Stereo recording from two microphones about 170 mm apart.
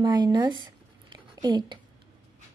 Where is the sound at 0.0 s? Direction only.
25° right (ahead or behind).